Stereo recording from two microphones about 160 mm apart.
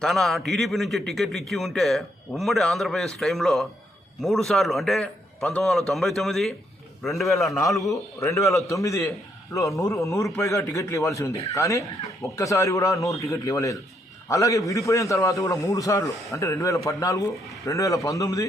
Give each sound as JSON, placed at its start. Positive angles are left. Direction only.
{"t": 0.0, "sound": "a man's voice", "side_deg": 0}
{"t": 7.9, "sound": "speech", "side_deg": 20}